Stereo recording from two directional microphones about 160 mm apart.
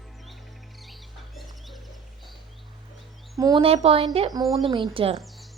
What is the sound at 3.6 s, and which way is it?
Speech, 40° right (ahead or behind).